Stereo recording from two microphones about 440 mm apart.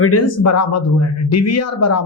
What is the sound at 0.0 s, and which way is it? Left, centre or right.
A woman's voice, left.